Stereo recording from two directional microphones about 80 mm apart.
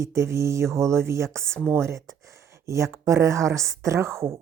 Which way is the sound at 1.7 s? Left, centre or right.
Right.